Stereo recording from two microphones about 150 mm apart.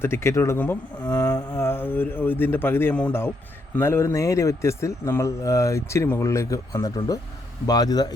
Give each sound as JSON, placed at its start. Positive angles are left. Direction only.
{"t": 0.0, "sound": "a man's voice", "side_deg": 15}